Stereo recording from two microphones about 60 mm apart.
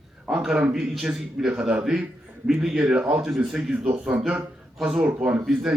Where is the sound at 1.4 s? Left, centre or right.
Centre.